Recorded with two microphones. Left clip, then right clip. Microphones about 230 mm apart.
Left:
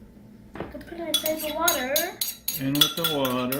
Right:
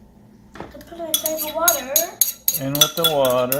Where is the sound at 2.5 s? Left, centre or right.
Right.